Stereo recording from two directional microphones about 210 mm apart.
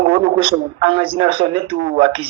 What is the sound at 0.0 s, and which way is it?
A man's voice, 25° right (ahead or behind).